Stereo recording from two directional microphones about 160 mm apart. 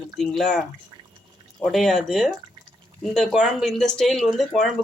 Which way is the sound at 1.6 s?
Centre (ahead or behind).